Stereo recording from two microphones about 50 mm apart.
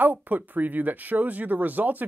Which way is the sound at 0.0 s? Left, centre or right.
Right.